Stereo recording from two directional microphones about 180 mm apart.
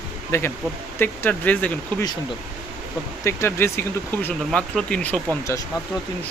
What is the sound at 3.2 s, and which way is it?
Speech, 15° left (ahead or behind).